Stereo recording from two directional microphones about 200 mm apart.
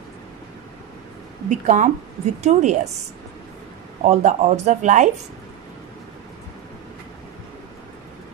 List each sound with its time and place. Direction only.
1.5 s speech: 35° right (ahead or behind)
4.0 s speech: 35° right (ahead or behind)